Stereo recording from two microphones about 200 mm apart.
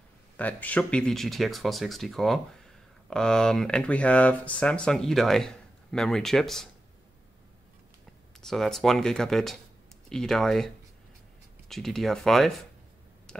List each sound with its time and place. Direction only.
0.4 s speech: 10° left (ahead or behind)
8.4 s speech: centre (ahead or behind)
11.7 s speech: centre (ahead or behind)
13.3 s a sound: 5° left (ahead or behind)